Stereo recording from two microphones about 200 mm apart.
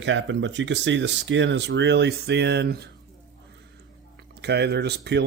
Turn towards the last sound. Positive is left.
turn(degrees=-55)  # may be behind; listen again after turning